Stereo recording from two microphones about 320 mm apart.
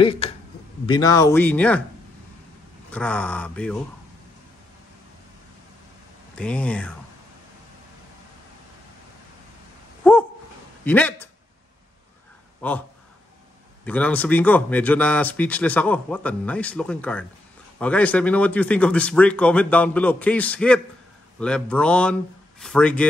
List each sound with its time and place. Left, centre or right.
0.0 s speech: centre
2.9 s speech: centre
6.3 s speech: centre
10.0 s a sound: centre
10.8 s speech: centre
12.6 s speech: centre
13.8 s speech: centre